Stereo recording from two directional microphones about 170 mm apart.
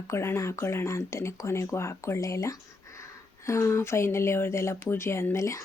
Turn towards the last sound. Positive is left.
turn(degrees=15)  # may be behind; listen again after turning